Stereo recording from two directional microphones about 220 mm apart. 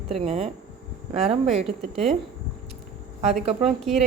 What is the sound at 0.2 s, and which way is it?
Speech, 25° right (ahead or behind).